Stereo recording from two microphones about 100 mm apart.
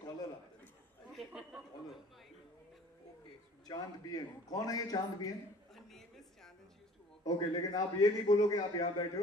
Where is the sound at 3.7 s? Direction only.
40° left (ahead or behind).